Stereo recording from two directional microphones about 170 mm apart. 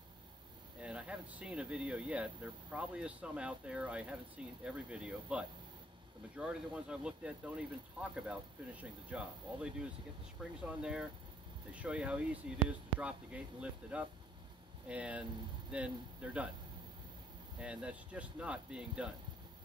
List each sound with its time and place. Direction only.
0.7 s speech: 5° right (ahead or behind)
17.6 s speech: 5° right (ahead or behind)